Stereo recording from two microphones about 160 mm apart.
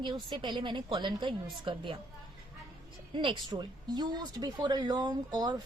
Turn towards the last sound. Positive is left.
turn(degrees=-25)  # may be behind; listen again after turning